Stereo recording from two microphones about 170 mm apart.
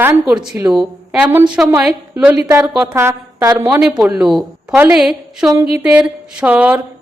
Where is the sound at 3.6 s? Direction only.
5° right (ahead or behind).